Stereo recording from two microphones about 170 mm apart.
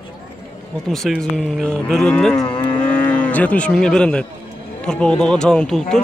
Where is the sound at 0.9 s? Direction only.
Centre (ahead or behind).